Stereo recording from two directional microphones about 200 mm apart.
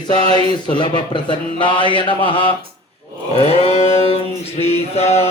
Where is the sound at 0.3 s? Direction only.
20° left (ahead or behind).